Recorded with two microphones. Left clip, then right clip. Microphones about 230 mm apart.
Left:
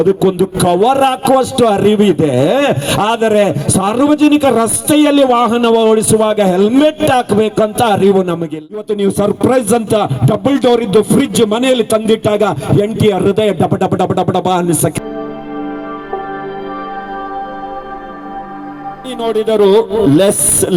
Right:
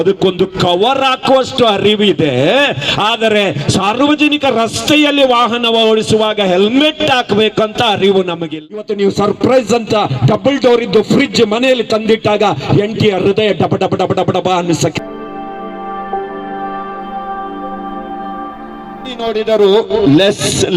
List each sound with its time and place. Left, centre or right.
0.0 s a man's voice: left
19.2 s a man's voice: left